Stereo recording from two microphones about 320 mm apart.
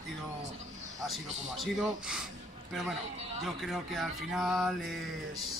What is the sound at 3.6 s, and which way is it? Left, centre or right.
Speech, centre.